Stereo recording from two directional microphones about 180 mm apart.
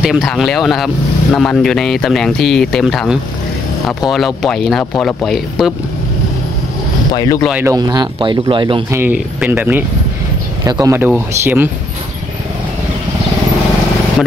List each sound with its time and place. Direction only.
0.0 s speech: centre (ahead or behind)
7.1 s speech: 20° left (ahead or behind)
7.5 s speech: 20° right (ahead or behind)
8.9 s speech: 10° right (ahead or behind)